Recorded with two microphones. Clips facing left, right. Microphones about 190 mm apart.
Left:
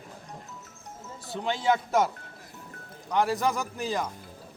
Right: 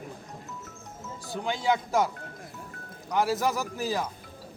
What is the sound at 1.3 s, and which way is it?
Speech, centre (ahead or behind).